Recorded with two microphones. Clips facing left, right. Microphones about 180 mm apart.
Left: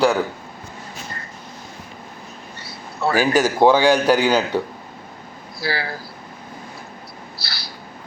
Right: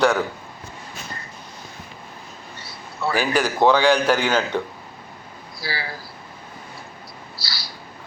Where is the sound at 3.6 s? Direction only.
10° left (ahead or behind).